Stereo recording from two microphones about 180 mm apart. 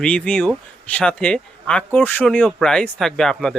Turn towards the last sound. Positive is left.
turn(degrees=5)  # may be behind; listen again after turning